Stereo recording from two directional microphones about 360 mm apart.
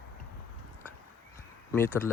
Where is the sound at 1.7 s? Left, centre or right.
Centre.